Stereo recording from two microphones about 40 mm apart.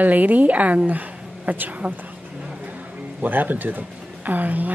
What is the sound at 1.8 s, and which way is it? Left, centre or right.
Speech, right.